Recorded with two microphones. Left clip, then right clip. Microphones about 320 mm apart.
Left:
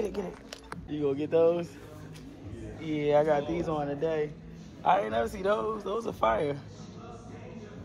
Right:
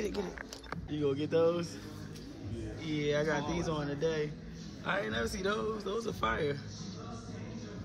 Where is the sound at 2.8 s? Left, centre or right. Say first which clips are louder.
Left 7 dB; centre.